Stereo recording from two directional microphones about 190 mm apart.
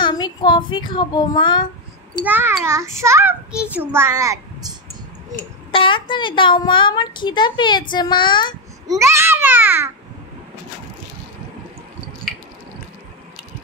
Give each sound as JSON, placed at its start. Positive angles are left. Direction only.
{"t": 0.0, "sound": "a child's voice", "side_deg": 20}
{"t": 2.1, "sound": "a child's voice", "side_deg": -10}
{"t": 5.7, "sound": "a child's voice", "side_deg": 25}
{"t": 8.8, "sound": "a child's voice", "side_deg": -15}